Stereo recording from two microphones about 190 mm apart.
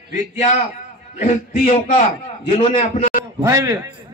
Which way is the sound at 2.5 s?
25° left (ahead or behind).